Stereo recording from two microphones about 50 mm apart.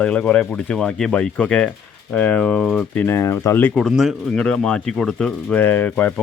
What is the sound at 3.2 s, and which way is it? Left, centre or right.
Speech, left.